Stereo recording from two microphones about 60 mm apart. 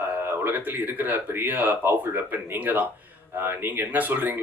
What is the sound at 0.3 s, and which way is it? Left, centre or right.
Speech, right.